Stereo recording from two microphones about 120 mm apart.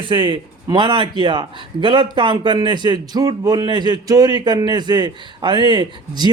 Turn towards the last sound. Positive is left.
turn(degrees=-40)  # may be behind; listen again after turning